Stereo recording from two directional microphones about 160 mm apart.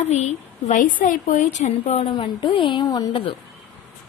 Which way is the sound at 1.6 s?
45° left (ahead or behind).